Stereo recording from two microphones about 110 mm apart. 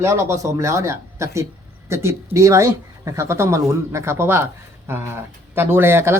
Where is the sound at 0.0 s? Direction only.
25° right (ahead or behind).